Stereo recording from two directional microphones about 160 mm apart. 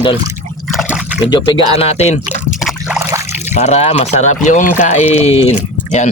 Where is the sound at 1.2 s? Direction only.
30° left (ahead or behind); by 2.6 s 45° left (ahead or behind).